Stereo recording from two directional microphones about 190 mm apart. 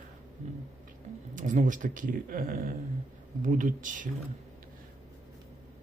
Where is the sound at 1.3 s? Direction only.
40° right (ahead or behind).